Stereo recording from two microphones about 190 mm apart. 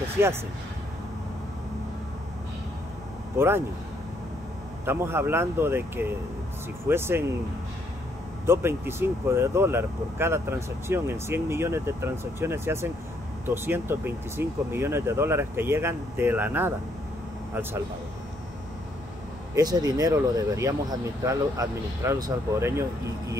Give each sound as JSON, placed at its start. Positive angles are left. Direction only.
{"t": 0.2, "sound": "speech", "side_deg": -10}
{"t": 3.3, "sound": "speech", "side_deg": -10}
{"t": 4.8, "sound": "speech", "side_deg": -10}
{"t": 8.5, "sound": "speech", "side_deg": -10}
{"t": 19.5, "sound": "speech", "side_deg": -20}